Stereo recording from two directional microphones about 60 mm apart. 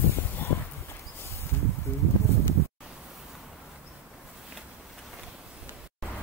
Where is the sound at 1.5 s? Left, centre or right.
Left.